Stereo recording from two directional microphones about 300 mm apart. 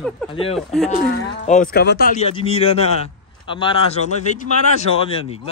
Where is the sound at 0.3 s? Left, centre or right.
Centre.